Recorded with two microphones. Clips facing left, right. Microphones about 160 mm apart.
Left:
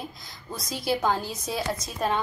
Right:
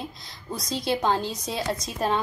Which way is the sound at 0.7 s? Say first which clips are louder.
Right 1 dB; 25° right (ahead or behind).